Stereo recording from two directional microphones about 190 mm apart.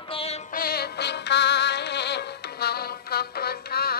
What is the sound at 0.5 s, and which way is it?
Music, 55° left (ahead or behind).